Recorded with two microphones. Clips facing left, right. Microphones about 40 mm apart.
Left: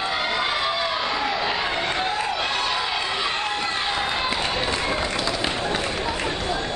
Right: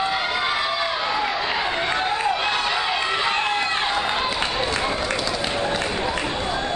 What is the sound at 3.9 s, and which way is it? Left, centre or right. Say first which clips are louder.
Run: right 1 dB; centre.